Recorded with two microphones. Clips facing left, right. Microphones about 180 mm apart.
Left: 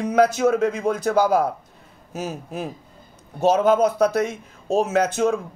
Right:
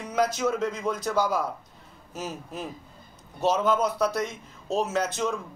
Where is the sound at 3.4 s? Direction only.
55° left (ahead or behind).